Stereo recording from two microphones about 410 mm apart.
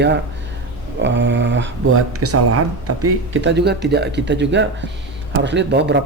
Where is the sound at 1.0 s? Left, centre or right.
Right.